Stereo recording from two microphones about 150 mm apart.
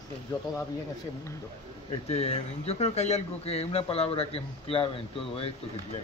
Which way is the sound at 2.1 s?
45° left (ahead or behind).